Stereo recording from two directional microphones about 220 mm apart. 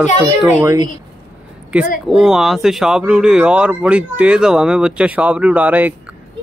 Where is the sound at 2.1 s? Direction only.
Centre (ahead or behind).